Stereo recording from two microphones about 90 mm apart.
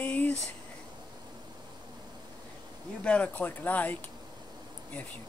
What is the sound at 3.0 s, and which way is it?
Speech, 15° left (ahead or behind).